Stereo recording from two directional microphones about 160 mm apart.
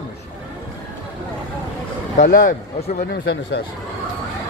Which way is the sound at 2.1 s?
60° left (ahead or behind).